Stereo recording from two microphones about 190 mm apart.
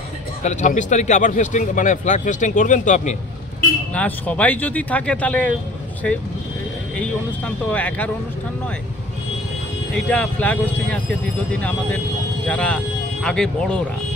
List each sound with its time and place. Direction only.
0.4 s speech: 40° left (ahead or behind)
3.9 s speech: 5° left (ahead or behind)
9.9 s speech: 5° left (ahead or behind)
12.4 s speech: 5° left (ahead or behind)